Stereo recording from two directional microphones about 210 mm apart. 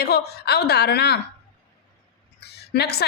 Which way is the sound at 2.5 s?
50° left (ahead or behind).